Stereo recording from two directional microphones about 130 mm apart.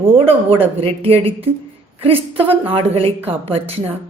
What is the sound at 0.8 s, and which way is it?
A woman's voice, 50° right (ahead or behind).